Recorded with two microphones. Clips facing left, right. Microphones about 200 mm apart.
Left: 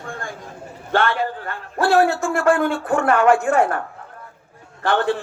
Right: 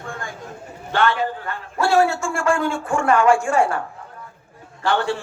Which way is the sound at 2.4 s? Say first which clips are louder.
Left 3 dB; 55° left (ahead or behind).